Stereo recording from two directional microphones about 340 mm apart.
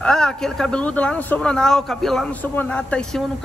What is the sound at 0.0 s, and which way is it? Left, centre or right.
Speech, centre.